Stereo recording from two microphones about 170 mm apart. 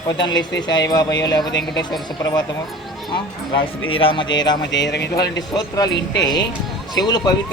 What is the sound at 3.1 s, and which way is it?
Speech, 30° left (ahead or behind).